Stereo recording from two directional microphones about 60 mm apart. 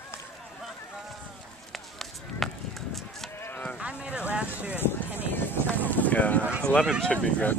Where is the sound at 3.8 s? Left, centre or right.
Centre.